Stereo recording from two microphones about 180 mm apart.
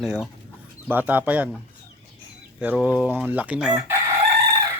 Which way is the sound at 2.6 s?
10° right (ahead or behind).